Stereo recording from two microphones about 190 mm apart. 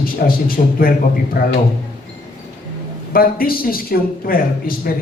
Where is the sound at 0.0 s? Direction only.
50° left (ahead or behind).